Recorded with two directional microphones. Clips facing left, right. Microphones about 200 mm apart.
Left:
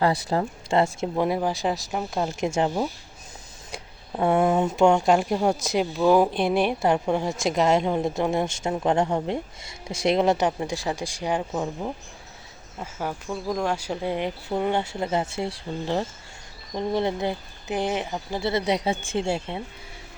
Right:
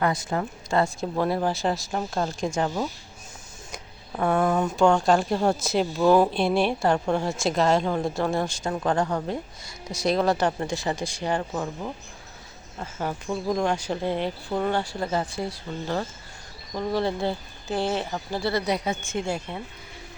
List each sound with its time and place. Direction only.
0.0 s speech: 30° left (ahead or behind)
1.1 s a woman's voice: 15° left (ahead or behind)
10.6 s a woman's voice: 10° left (ahead or behind); by 19.6 s 25° left (ahead or behind)